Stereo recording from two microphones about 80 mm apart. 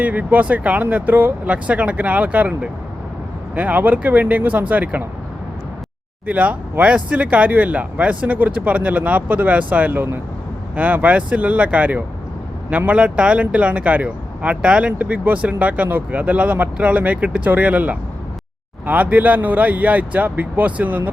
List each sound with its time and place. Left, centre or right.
0.0 s speech: centre
6.2 s speech: centre